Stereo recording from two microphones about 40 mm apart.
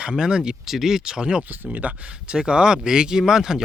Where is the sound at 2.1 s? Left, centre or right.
Right.